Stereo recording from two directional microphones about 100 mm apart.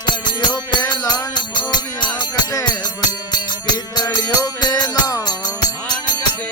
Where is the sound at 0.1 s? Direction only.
45° left (ahead or behind).